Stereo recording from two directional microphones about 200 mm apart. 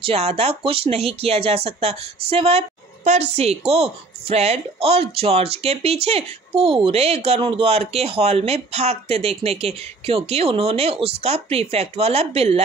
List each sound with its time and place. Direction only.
0.0 s speech: 30° right (ahead or behind)